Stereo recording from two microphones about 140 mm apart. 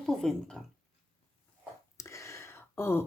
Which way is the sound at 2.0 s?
20° left (ahead or behind).